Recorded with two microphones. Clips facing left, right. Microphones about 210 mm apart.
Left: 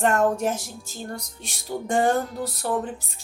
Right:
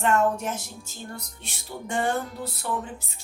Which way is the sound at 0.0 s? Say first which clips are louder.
Left 2 dB; 40° left (ahead or behind).